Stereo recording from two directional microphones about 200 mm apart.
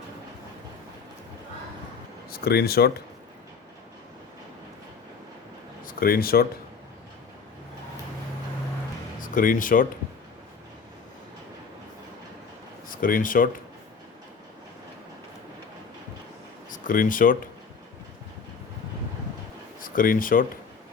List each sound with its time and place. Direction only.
2.3 s speech: 50° left (ahead or behind)
5.8 s speech: 45° left (ahead or behind)
9.2 s speech: 40° left (ahead or behind)
12.9 s speech: 45° left (ahead or behind)
16.7 s speech: 40° left (ahead or behind)
19.8 s speech: 45° left (ahead or behind)